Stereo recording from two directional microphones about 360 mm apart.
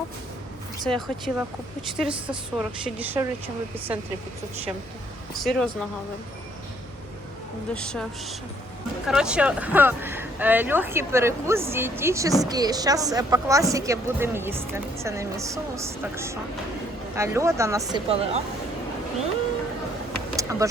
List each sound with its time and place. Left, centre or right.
0.9 s a woman's voice: centre
5.3 s a woman's voice: centre
7.7 s a woman's voice: centre
20.3 s vehicle: centre